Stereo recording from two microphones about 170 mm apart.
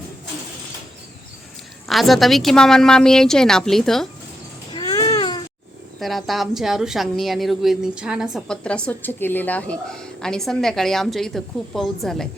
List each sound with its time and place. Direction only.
1.9 s a woman's voice: centre (ahead or behind)
4.7 s baby cry: 20° left (ahead or behind)
6.0 s a woman's voice: centre (ahead or behind)